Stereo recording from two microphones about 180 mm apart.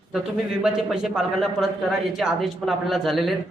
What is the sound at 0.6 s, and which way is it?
A man's voice, 5° right (ahead or behind).